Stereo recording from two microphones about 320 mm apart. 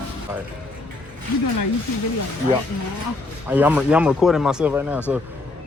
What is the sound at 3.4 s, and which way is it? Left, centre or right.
Speech, centre.